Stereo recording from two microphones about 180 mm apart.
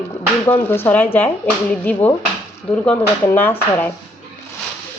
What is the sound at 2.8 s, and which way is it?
Speech, 10° left (ahead or behind).